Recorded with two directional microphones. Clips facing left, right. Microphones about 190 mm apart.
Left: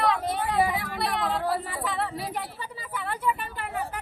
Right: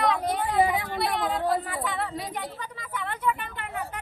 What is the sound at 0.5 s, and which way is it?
Speech, 20° right (ahead or behind).